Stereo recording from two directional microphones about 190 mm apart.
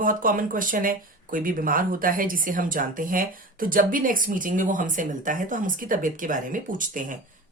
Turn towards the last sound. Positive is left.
turn(degrees=-45)  # may be behind; listen again after turning